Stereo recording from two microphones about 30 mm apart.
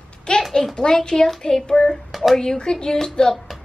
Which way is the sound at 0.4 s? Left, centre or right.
Centre.